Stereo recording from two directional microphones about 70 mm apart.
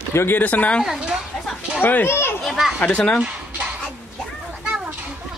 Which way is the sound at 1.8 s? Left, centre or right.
Left.